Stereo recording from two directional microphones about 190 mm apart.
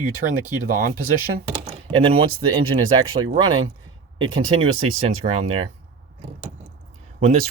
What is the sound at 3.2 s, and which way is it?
Speech, 25° right (ahead or behind).